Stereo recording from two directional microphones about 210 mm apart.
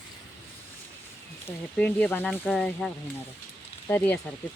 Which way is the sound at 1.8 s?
5° left (ahead or behind).